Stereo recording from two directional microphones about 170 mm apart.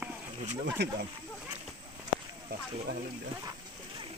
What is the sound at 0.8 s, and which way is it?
Speech, 90° right.